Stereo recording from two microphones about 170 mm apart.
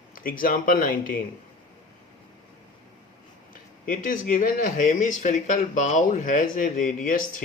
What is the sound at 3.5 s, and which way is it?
Speech, 50° left (ahead or behind).